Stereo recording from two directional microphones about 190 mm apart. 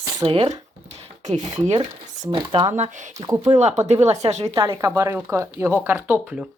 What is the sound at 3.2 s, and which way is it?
Speech, 30° right (ahead or behind).